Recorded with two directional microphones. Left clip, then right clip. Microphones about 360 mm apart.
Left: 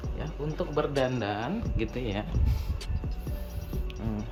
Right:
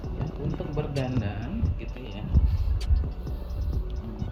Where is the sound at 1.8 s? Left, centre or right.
Centre.